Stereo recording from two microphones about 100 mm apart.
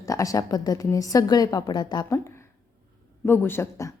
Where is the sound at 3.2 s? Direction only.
25° left (ahead or behind).